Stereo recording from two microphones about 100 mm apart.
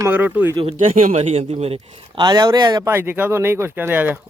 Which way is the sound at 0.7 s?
90° right.